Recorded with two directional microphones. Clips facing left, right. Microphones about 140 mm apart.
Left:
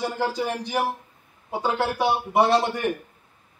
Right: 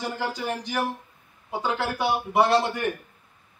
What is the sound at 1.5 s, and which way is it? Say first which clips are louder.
Speech: left 3 dB; 30° left (ahead or behind).